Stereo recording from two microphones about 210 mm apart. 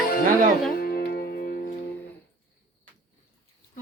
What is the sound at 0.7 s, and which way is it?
Music, 45° left (ahead or behind).